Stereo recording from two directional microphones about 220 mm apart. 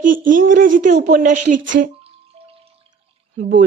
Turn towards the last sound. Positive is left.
turn(degrees=-40)  # may be behind; listen again after turning